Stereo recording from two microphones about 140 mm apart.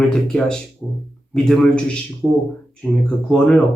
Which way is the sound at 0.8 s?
15° left (ahead or behind).